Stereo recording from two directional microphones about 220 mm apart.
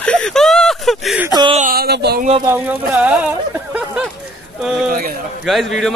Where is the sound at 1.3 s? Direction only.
20° right (ahead or behind).